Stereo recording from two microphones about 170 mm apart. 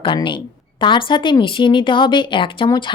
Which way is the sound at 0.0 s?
30° left (ahead or behind).